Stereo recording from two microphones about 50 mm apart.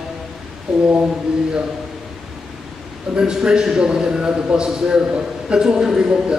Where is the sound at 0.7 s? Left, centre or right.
Centre.